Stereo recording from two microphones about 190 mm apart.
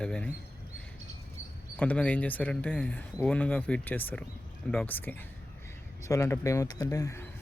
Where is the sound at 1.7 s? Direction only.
5° left (ahead or behind).